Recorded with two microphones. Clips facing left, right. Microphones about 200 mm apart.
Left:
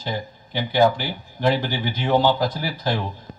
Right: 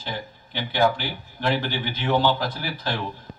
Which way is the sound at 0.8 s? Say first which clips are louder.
Left 4 dB; 15° left (ahead or behind).